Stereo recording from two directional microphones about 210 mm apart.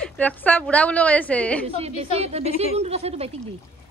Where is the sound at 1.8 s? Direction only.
30° right (ahead or behind).